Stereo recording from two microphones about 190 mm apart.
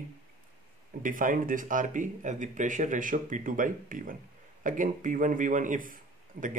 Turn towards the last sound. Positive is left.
turn(degrees=-45)  # may be behind; listen again after turning